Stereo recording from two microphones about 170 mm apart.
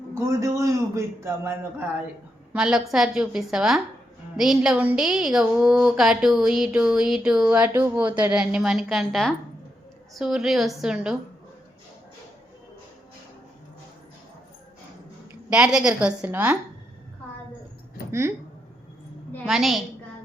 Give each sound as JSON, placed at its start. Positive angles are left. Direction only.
{"t": 0.1, "sound": "a man's voice", "side_deg": -15}
{"t": 2.5, "sound": "a woman's voice", "side_deg": -5}
{"t": 15.3, "sound": "a woman's voice", "side_deg": -5}
{"t": 18.1, "sound": "a man's voice", "side_deg": -15}
{"t": 19.5, "sound": "a woman's voice", "side_deg": 0}